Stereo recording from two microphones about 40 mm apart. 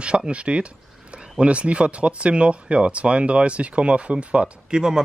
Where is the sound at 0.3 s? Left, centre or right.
Right.